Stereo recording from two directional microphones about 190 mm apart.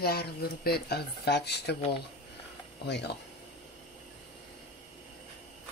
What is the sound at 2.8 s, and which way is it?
Speech, 60° left (ahead or behind).